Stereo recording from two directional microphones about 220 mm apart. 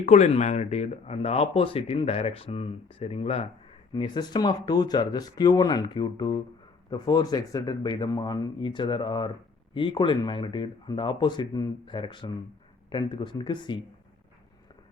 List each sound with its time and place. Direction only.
0.0 s speech: 30° left (ahead or behind)